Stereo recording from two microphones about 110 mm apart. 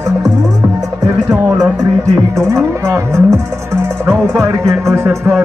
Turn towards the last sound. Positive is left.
turn(degrees=-25)  # may be behind; listen again after turning